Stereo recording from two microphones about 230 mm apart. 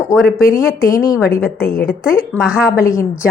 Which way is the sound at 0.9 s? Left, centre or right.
Centre.